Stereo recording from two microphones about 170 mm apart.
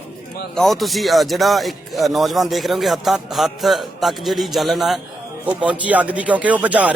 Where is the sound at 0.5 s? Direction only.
Centre (ahead or behind).